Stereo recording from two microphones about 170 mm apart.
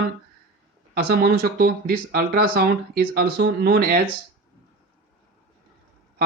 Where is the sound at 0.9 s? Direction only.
65° right (ahead or behind).